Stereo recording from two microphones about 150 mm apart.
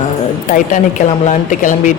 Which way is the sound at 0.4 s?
60° left (ahead or behind).